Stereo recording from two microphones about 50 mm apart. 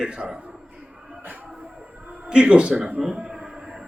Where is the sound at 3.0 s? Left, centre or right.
Centre.